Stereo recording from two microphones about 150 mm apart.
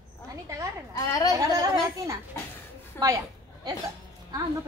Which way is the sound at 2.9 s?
25° right (ahead or behind).